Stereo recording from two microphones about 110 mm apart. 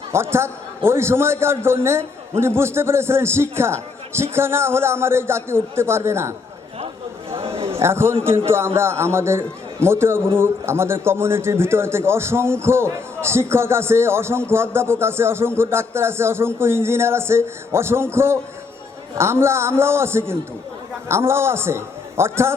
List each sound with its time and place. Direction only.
0.1 s a man's voice: 25° right (ahead or behind)
7.3 s a sound: 65° right (ahead or behind)
7.7 s a man's voice: 25° right (ahead or behind)